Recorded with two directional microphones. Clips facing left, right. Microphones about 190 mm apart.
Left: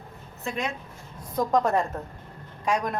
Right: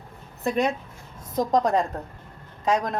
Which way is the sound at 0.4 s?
40° right (ahead or behind).